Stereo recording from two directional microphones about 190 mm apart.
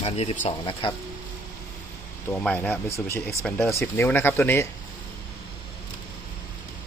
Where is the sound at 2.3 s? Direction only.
10° left (ahead or behind).